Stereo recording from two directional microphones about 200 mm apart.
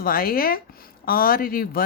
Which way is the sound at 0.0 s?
45° left (ahead or behind).